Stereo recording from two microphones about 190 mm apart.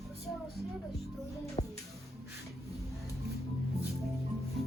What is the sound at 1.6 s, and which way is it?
Music, 30° left (ahead or behind).